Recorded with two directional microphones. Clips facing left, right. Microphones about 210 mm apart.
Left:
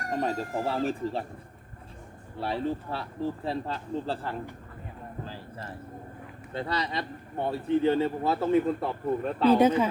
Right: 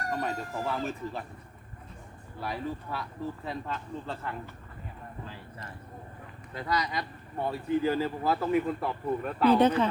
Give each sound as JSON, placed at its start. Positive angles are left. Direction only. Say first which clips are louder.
{"t": 0.1, "sound": "speech", "louder": "left 5 dB", "side_deg": 30}
{"t": 2.4, "sound": "speech", "louder": "left 5 dB", "side_deg": 30}
{"t": 5.2, "sound": "a sound", "louder": "left 5 dB", "side_deg": 30}
{"t": 6.5, "sound": "speech", "louder": "left 1 dB", "side_deg": 30}
{"t": 9.6, "sound": "a woman's voice", "louder": "left 2 dB", "side_deg": 10}